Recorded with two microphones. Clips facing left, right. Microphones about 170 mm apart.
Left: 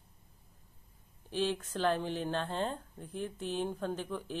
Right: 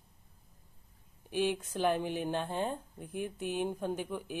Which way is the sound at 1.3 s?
15° right (ahead or behind).